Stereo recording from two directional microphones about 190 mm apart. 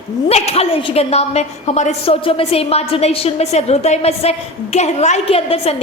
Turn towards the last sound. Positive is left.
turn(degrees=30)  # may be behind; listen again after turning